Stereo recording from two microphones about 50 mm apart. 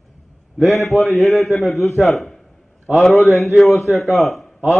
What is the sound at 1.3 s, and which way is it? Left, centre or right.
A man's voice, centre.